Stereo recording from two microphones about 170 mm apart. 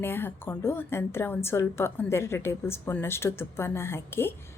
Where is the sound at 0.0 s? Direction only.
10° left (ahead or behind).